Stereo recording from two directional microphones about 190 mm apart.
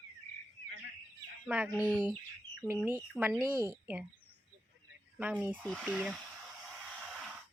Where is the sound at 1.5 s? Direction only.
5° right (ahead or behind).